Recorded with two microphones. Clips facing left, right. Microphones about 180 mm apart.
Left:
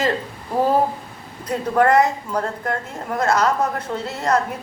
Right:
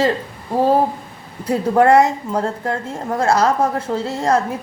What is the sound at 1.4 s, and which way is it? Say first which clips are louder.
A woman's voice: right 4 dB; 30° right (ahead or behind).